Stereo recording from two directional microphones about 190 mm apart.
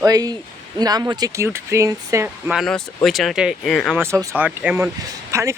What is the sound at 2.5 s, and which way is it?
Speech, centre (ahead or behind).